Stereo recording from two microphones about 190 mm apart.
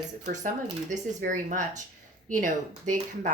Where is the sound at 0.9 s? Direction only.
40° right (ahead or behind).